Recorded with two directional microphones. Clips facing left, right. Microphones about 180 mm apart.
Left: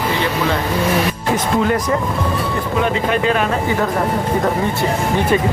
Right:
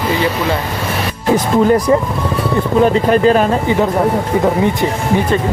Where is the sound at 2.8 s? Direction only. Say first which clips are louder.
Right 7 dB; 35° right (ahead or behind).